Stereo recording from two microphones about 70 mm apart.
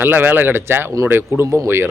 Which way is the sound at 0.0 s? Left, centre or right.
Right.